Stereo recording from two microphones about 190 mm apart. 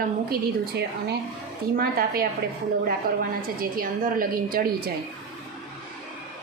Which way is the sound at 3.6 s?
45° right (ahead or behind).